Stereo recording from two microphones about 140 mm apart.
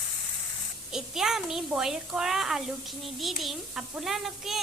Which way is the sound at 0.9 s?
5° right (ahead or behind).